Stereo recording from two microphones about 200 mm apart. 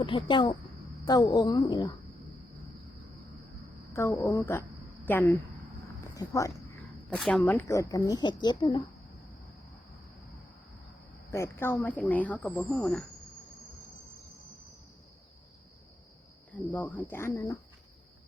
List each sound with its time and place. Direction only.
0.0 s a woman's voice: 25° left (ahead or behind)
3.9 s speech: 15° left (ahead or behind)
6.1 s a sound: 15° left (ahead or behind)
7.2 s speech: 5° left (ahead or behind); by 8.9 s 20° left (ahead or behind)
11.3 s speech: 15° left (ahead or behind)
16.5 s speech: 10° left (ahead or behind)